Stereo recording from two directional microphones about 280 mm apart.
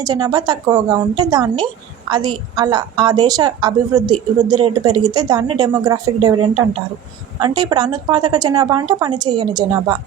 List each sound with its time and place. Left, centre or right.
0.0 s speech: centre